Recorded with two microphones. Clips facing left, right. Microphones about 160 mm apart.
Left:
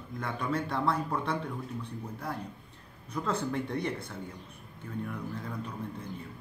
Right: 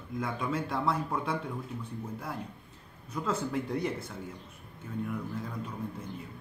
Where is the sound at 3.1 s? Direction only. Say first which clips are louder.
Even; 5° right (ahead or behind).